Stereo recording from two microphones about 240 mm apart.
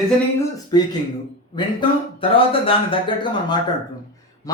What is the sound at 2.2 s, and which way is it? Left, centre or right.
Speech, left.